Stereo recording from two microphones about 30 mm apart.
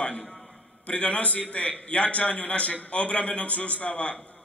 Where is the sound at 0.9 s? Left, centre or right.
Left.